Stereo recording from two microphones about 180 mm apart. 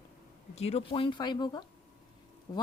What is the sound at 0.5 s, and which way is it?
A woman's voice, 35° left (ahead or behind).